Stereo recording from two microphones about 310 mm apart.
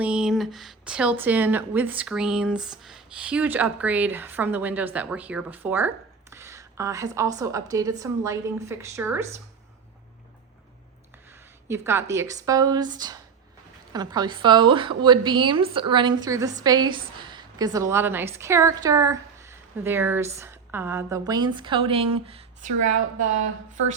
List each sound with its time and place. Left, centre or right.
0.0 s a woman's voice: centre
11.7 s a woman's voice: centre
22.8 s a woman's voice: right